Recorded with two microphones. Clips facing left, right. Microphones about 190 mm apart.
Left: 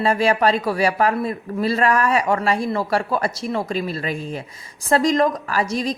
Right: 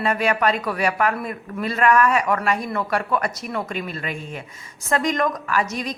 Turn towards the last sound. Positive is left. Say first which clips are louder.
# left 2 dB
turn(degrees=30)  # may be behind; listen again after turning